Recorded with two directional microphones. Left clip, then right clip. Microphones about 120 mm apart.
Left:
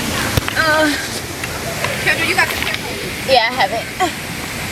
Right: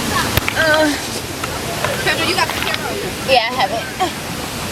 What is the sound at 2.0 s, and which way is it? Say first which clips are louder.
Hubbub: left 3 dB; 20° right (ahead or behind).